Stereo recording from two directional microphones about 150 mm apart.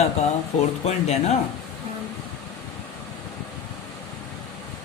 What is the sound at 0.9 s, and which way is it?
Speech, 45° left (ahead or behind).